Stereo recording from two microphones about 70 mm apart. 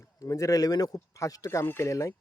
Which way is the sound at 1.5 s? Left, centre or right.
Left.